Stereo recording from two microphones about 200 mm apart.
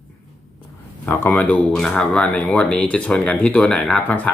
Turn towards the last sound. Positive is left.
turn(degrees=5)  # may be behind; listen again after turning